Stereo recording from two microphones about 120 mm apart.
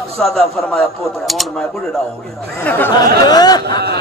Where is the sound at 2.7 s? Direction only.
15° left (ahead or behind).